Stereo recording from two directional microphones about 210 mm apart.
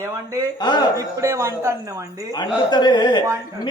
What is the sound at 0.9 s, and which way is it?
Speech, 15° right (ahead or behind).